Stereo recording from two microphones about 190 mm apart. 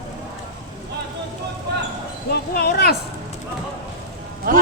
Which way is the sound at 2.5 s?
55° left (ahead or behind).